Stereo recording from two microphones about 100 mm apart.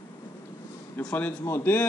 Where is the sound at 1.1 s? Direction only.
15° left (ahead or behind).